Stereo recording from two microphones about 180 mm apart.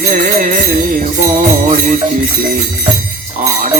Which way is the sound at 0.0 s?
45° right (ahead or behind).